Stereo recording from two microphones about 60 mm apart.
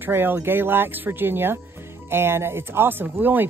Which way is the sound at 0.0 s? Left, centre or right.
Right.